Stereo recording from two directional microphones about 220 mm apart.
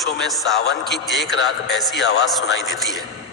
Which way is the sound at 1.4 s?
50° left (ahead or behind).